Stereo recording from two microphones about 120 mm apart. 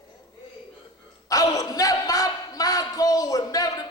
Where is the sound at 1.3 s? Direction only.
30° left (ahead or behind).